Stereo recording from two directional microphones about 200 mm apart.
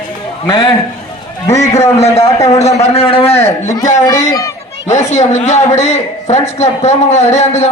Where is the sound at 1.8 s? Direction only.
35° left (ahead or behind).